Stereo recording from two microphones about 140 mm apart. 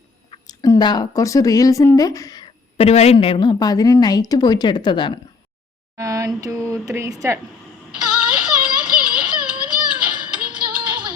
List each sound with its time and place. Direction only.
0.3 s a woman's voice: 25° left (ahead or behind)
2.7 s a woman's voice: 45° left (ahead or behind)
6.0 s speech: 20° right (ahead or behind)
7.9 s synthetic singing: 5° right (ahead or behind)
10.2 s music: 35° right (ahead or behind)